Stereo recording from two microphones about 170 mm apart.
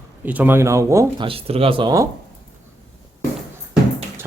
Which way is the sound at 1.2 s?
35° right (ahead or behind).